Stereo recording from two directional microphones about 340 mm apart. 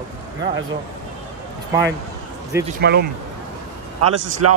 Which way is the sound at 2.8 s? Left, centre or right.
Right.